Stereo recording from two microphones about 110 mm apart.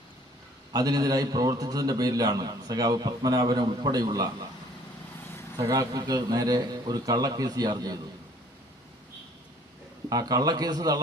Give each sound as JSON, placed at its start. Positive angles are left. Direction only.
{"t": 0.7, "sound": "a man's voice", "side_deg": -35}
{"t": 5.5, "sound": "a man's voice", "side_deg": -30}
{"t": 10.1, "sound": "a man's voice", "side_deg": -35}